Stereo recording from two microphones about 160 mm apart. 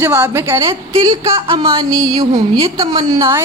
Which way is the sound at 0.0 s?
10° right (ahead or behind).